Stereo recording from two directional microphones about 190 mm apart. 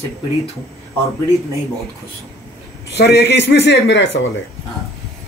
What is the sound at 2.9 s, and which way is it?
Speech, 60° left (ahead or behind).